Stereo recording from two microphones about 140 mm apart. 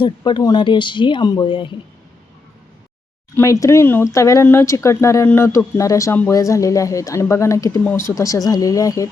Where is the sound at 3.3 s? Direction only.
20° left (ahead or behind).